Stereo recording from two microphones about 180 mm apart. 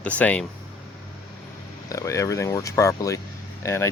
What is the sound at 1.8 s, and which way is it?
Speech, 20° left (ahead or behind).